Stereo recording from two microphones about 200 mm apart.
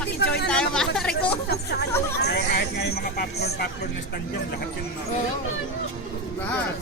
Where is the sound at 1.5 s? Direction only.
55° left (ahead or behind).